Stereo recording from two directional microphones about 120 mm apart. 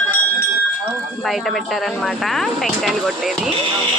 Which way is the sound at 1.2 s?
Centre (ahead or behind).